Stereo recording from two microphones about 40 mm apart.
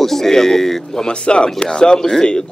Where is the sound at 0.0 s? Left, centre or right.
Centre.